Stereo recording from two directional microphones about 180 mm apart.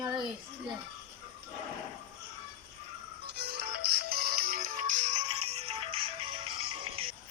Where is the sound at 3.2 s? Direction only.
60° right (ahead or behind); by 7.1 s 30° right (ahead or behind).